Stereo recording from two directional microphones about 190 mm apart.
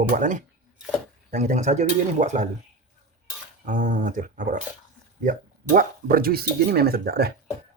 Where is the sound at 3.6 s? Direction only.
40° right (ahead or behind).